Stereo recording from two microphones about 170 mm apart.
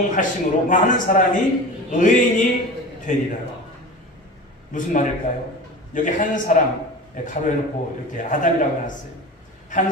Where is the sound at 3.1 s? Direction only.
50° left (ahead or behind).